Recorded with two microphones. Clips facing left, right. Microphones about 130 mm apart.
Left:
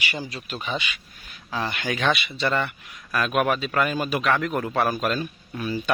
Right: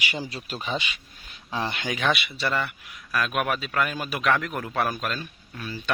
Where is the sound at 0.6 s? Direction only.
30° right (ahead or behind).